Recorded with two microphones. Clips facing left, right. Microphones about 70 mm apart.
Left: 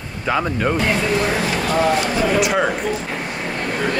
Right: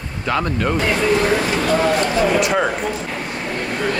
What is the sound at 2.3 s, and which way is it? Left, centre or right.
Speech, centre.